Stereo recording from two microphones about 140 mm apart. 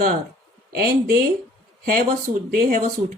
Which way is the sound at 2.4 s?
90° right.